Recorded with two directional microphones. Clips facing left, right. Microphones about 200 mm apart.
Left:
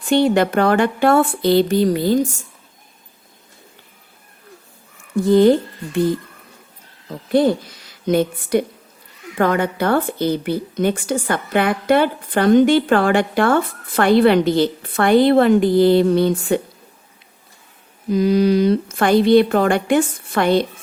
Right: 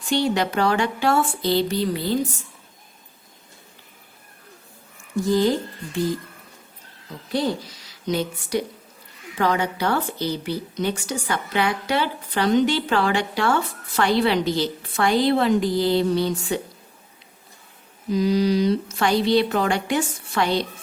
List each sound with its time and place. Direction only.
0.0 s a woman's voice: 55° left (ahead or behind)
5.1 s speech: 60° left (ahead or behind)
7.3 s a woman's voice: 55° left (ahead or behind)
18.1 s a woman's voice: 55° left (ahead or behind)